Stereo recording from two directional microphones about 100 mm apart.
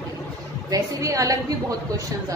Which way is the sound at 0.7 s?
35° right (ahead or behind).